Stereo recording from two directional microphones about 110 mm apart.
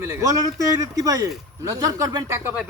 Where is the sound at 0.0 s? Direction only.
30° right (ahead or behind).